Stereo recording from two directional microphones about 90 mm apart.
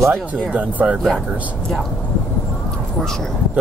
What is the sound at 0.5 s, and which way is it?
Speech, 15° right (ahead or behind).